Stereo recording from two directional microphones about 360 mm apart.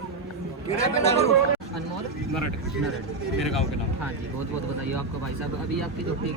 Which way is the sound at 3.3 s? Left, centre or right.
Centre.